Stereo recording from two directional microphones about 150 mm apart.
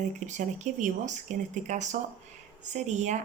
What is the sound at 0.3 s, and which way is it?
Speech, 55° right (ahead or behind).